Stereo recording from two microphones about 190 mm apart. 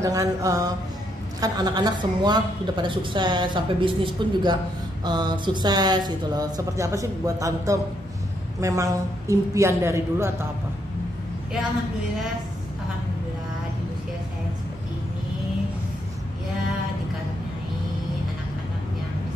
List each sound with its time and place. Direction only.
0.0 s a woman's voice: 15° right (ahead or behind)